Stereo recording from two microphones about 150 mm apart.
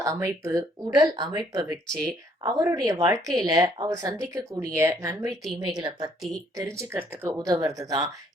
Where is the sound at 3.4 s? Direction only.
25° right (ahead or behind).